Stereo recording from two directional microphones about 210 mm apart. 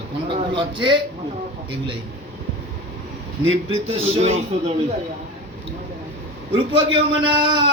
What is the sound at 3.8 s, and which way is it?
Speech, 30° right (ahead or behind).